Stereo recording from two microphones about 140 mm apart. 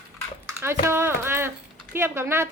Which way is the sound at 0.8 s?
15° right (ahead or behind).